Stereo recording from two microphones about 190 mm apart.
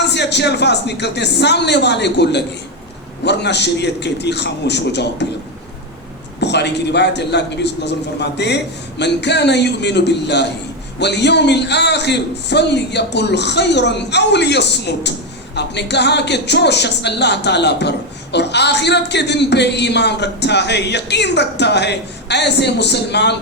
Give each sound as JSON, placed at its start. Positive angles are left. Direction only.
{"t": 0.1, "sound": "speech", "side_deg": 65}
{"t": 6.4, "sound": "speech", "side_deg": 65}